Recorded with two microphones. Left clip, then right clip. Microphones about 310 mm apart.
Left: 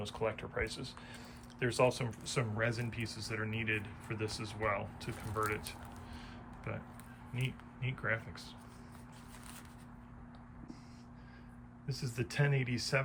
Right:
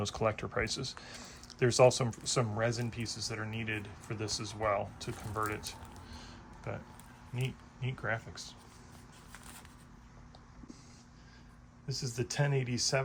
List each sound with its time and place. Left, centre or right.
0.0 s speech: right
11.9 s speech: centre